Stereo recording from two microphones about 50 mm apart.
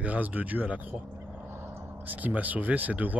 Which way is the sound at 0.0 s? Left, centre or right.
Right.